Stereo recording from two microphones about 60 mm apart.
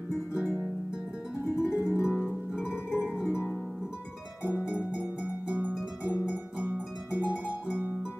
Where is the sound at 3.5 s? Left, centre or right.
Centre.